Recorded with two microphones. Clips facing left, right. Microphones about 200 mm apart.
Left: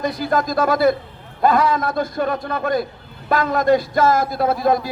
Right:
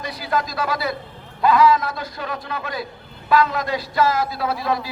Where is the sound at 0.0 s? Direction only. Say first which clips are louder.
Left 5 dB; 50° left (ahead or behind).